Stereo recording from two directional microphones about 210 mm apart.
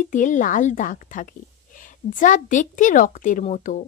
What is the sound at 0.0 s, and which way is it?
Speech, 40° left (ahead or behind).